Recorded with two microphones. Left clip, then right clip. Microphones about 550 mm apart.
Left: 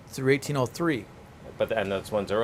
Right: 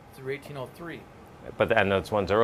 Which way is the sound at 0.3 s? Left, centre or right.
Left.